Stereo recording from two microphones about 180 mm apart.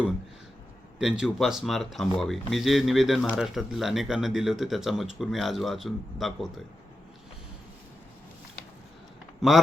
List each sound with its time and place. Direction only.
0.9 s speech: 5° right (ahead or behind)